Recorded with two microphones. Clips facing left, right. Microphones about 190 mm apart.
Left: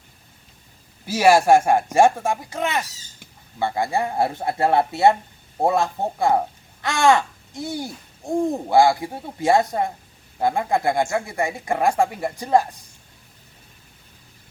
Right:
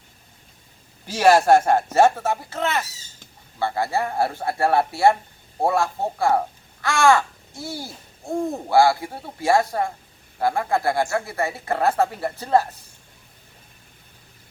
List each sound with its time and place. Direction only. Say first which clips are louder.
1.0 s speech: left 1 dB; 10° left (ahead or behind)